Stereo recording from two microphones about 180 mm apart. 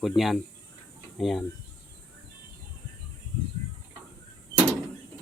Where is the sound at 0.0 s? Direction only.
Centre (ahead or behind).